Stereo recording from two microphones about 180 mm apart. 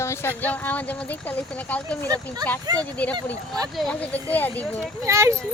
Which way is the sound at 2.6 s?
20° right (ahead or behind).